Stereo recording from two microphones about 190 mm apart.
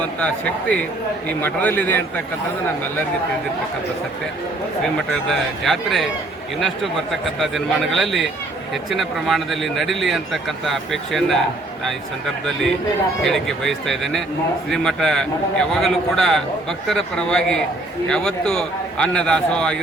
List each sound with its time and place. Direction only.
0.0 s a man's voice: 5° left (ahead or behind)
4.9 s a man's voice: centre (ahead or behind)
13.2 s a man's voice: centre (ahead or behind)